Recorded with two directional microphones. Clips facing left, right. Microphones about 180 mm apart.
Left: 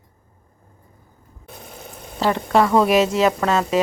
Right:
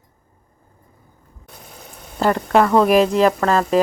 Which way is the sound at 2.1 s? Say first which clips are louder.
Right 2 dB; centre (ahead or behind).